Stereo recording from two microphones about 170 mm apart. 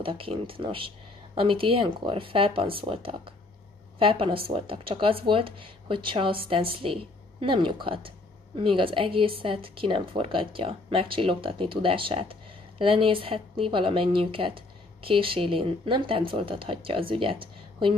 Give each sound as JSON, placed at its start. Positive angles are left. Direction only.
{"t": 0.0, "sound": "a woman's voice", "side_deg": -30}